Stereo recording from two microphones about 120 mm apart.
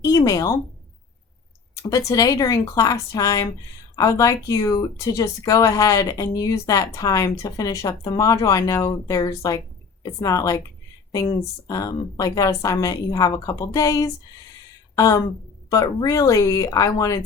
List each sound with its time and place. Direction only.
0.0 s speech: 30° left (ahead or behind)
1.7 s speech: 25° left (ahead or behind)
16.0 s speech: 30° left (ahead or behind)